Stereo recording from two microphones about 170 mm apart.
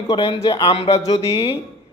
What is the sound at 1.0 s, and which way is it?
Speech, 20° left (ahead or behind).